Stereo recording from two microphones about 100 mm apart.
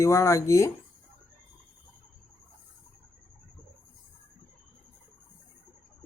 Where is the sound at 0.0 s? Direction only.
25° left (ahead or behind).